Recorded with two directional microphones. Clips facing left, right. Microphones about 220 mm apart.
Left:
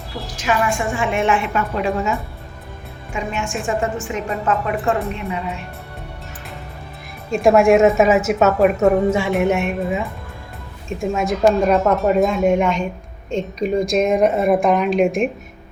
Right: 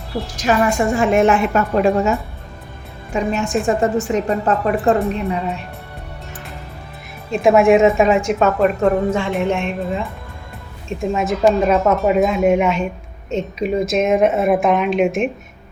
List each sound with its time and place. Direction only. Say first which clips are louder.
0.3 s a woman's voice: right 4 dB; 40° right (ahead or behind)
7.3 s a woman's voice: right 1 dB; centre (ahead or behind)